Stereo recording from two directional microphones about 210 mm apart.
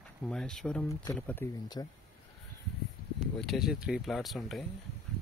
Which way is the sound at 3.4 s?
Centre (ahead or behind).